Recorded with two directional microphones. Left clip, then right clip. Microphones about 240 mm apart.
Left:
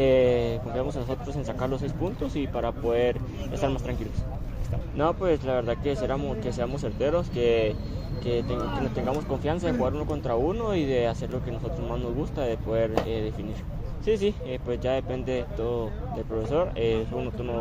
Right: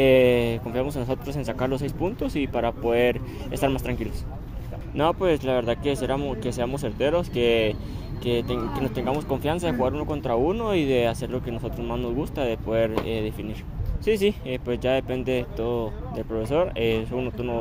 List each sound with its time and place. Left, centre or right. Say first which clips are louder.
0.0 s speech: right 3 dB; right
4.9 s speech: right 3 dB; right
14.0 s speech: right 3 dB; right